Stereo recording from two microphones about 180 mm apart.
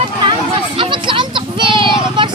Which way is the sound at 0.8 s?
25° right (ahead or behind).